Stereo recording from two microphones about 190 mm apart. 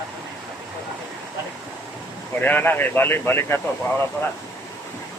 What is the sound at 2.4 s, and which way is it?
Speech, 10° left (ahead or behind).